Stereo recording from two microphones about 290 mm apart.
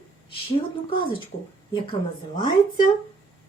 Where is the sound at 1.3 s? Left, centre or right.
Centre.